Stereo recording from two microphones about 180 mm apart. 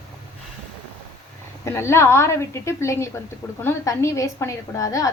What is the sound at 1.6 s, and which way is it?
A woman's voice, 15° left (ahead or behind).